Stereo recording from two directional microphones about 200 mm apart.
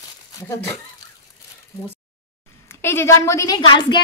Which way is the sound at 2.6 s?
10° left (ahead or behind).